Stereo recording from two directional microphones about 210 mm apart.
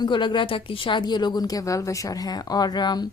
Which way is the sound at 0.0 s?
20° left (ahead or behind).